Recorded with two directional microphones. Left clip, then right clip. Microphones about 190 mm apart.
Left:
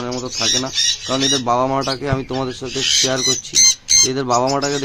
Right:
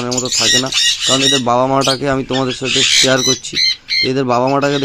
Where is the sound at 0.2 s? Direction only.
20° right (ahead or behind).